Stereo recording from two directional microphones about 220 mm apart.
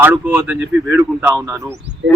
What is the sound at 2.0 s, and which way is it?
Speech, 55° right (ahead or behind).